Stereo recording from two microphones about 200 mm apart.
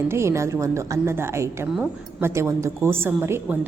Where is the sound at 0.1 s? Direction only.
15° right (ahead or behind).